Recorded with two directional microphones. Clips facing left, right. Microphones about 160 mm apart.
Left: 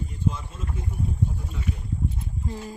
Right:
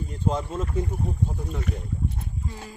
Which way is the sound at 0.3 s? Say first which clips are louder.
Right 5 dB; 65° right (ahead or behind).